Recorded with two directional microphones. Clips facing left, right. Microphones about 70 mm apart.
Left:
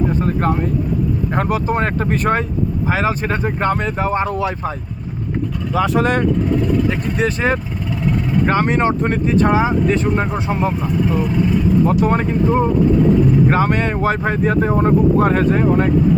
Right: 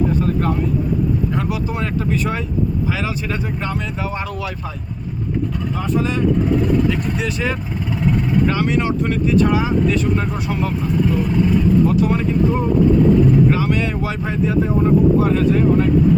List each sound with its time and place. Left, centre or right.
1.4 s speech: left
5.7 s speech: left
6.9 s speech: left
12.0 s speech: left